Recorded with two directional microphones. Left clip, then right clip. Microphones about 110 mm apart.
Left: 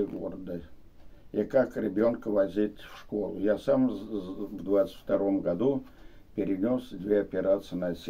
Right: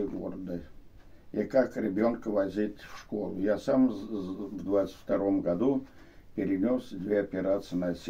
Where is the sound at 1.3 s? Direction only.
20° left (ahead or behind).